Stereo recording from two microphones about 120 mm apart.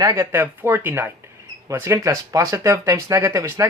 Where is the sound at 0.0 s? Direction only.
25° right (ahead or behind).